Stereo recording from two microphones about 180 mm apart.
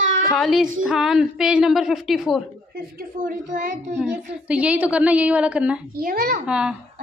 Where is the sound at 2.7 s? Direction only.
50° right (ahead or behind).